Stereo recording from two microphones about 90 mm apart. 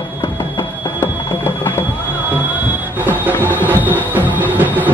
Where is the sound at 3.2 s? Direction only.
20° right (ahead or behind).